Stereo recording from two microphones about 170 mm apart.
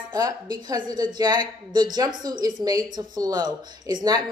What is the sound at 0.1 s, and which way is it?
A woman's voice, 25° right (ahead or behind).